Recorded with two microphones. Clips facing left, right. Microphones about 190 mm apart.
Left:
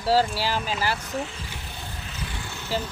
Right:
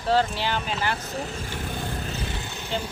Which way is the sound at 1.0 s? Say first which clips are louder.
Even; 35° right (ahead or behind).